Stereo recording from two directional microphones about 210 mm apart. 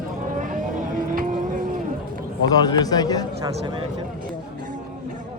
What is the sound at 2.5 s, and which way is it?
Speech, 20° left (ahead or behind).